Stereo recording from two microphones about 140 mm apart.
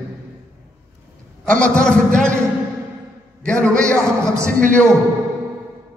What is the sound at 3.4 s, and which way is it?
Speech, 5° left (ahead or behind).